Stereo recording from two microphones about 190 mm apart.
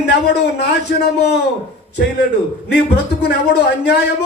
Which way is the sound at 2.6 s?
60° left (ahead or behind).